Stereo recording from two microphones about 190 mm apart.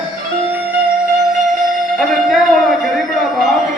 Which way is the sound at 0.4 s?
10° right (ahead or behind).